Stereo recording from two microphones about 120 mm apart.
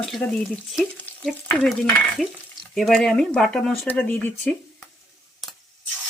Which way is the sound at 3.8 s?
15° left (ahead or behind).